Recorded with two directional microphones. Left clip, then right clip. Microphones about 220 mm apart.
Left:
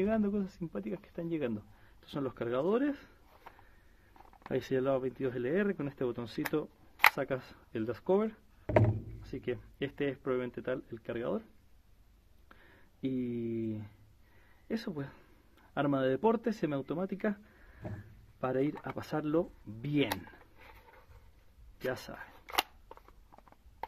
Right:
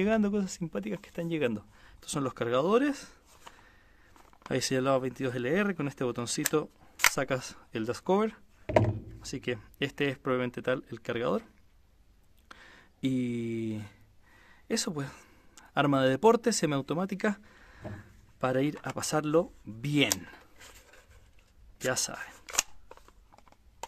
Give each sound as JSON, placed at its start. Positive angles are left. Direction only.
{"t": 0.0, "sound": "speech", "side_deg": -30}
{"t": 4.5, "sound": "speech", "side_deg": -25}
{"t": 8.6, "sound": "speech", "side_deg": 0}
{"t": 9.2, "sound": "speech", "side_deg": -25}
{"t": 12.4, "sound": "speech", "side_deg": -30}
{"t": 18.4, "sound": "speech", "side_deg": -25}
{"t": 21.8, "sound": "speech", "side_deg": -25}
{"t": 22.8, "sound": "a sound", "side_deg": -5}